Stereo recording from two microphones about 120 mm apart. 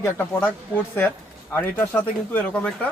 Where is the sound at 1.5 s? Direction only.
15° left (ahead or behind).